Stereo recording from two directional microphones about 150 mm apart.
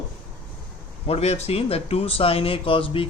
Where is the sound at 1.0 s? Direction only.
45° left (ahead or behind).